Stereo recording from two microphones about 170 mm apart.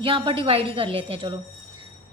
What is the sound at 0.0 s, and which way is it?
A woman's voice, 30° right (ahead or behind).